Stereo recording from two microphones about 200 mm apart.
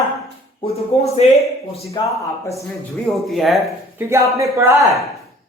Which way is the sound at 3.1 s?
Centre (ahead or behind).